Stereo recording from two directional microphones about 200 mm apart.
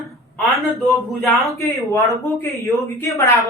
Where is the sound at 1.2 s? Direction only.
Centre (ahead or behind).